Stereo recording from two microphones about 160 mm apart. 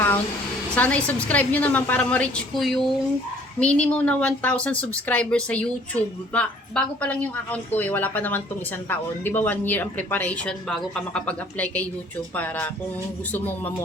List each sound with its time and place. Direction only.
0.8 s a woman's voice: 10° left (ahead or behind)